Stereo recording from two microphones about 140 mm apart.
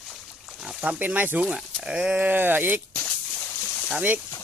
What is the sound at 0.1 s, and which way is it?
Speech, centre (ahead or behind).